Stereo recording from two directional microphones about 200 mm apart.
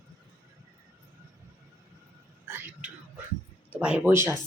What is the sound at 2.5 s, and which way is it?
Whispering, 10° right (ahead or behind).